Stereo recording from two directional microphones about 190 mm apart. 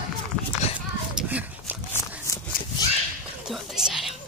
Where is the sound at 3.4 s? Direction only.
5° right (ahead or behind).